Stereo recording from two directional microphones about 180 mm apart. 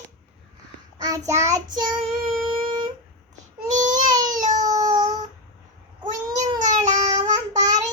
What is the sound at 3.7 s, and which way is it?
Baby cry, 45° right (ahead or behind).